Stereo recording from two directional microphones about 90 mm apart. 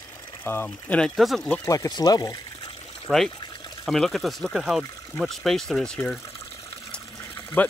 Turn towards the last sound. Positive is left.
turn(degrees=20)  # may be behind; listen again after turning